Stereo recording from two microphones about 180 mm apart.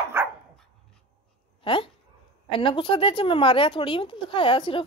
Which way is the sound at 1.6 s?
30° left (ahead or behind).